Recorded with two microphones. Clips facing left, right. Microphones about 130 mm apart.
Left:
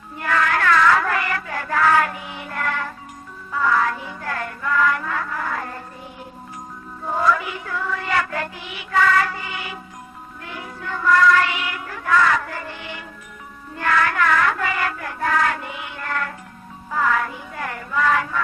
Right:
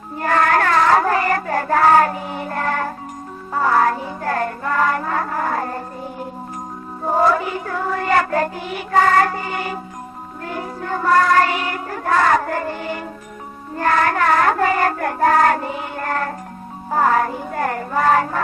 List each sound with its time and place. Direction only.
0.2 s child singing: 40° right (ahead or behind)
3.5 s music: 40° right (ahead or behind)
7.0 s music: 40° right (ahead or behind)
13.7 s child singing: 40° right (ahead or behind)
16.9 s music: 40° right (ahead or behind)